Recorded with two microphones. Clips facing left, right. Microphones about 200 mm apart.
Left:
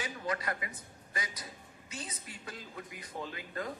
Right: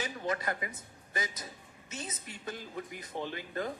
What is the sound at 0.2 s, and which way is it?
A man's voice, 25° right (ahead or behind).